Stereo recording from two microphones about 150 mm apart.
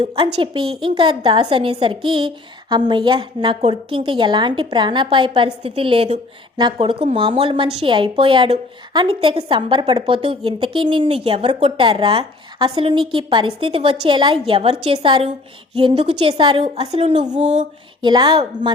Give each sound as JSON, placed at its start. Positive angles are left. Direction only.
{"t": 0.0, "sound": "a woman's voice", "side_deg": -40}